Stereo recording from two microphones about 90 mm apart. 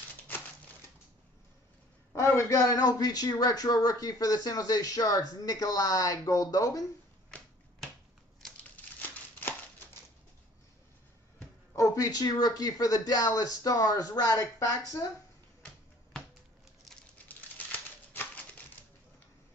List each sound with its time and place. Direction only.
2.1 s a man's voice: 30° left (ahead or behind)
11.7 s a man's voice: 35° left (ahead or behind)
17.3 s typewriter: 20° left (ahead or behind)